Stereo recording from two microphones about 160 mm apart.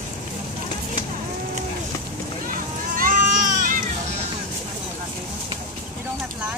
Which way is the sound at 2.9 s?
60° right (ahead or behind).